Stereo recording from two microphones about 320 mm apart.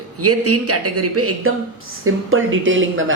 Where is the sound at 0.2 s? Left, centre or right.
Right.